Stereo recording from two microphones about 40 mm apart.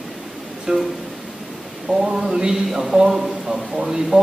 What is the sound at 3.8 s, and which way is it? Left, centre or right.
Speech, centre.